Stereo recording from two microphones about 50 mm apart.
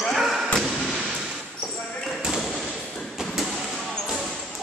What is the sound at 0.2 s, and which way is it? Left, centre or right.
Slam, centre.